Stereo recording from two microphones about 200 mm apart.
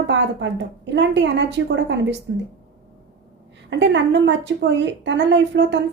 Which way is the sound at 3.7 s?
65° right (ahead or behind).